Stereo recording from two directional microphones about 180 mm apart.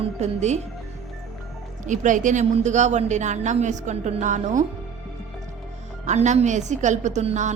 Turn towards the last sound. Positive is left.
turn(degrees=-40)  # may be behind; listen again after turning